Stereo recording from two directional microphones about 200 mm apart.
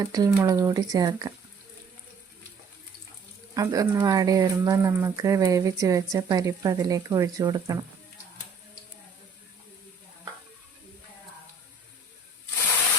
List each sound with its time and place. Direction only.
0.0 s speech: 20° right (ahead or behind)
3.5 s speech: 20° right (ahead or behind)